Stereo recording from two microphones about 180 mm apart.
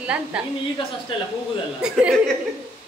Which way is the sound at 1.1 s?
30° left (ahead or behind).